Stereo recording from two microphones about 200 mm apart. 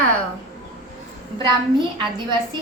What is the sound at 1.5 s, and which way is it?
A child's voice, 20° right (ahead or behind).